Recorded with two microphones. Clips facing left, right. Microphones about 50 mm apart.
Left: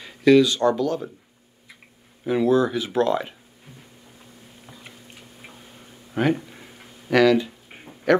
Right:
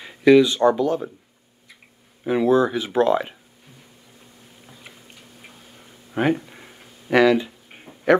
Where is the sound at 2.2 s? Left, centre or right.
Centre.